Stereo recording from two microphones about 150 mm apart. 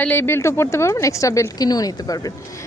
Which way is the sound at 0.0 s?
15° left (ahead or behind).